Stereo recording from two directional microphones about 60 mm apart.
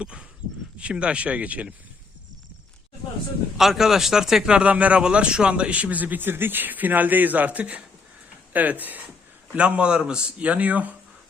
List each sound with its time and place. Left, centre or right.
0.0 s speech: centre
3.6 s speech: centre; by 10.9 s right